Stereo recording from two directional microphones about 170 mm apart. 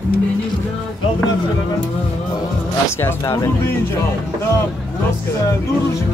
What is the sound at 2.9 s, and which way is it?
Speech, 15° left (ahead or behind).